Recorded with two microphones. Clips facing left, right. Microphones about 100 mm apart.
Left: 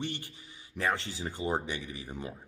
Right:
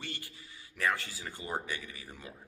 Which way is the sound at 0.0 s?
20° left (ahead or behind).